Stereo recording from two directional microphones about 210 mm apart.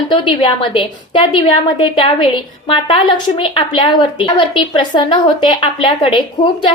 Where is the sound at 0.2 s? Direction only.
20° left (ahead or behind).